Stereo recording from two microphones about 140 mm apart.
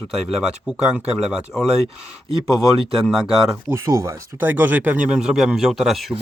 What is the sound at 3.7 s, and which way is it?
Speech, 20° right (ahead or behind).